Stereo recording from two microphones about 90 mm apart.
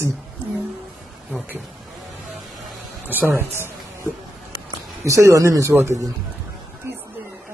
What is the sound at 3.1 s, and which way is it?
Speech, 20° right (ahead or behind).